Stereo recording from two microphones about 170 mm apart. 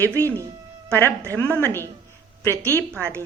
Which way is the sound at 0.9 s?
10° left (ahead or behind).